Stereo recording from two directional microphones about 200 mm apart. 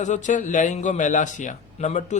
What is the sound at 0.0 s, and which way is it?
A man's voice, 40° left (ahead or behind).